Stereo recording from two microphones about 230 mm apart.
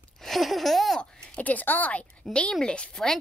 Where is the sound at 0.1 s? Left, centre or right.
Centre.